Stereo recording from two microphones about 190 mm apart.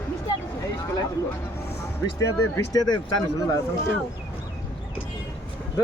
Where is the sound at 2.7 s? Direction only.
20° left (ahead or behind).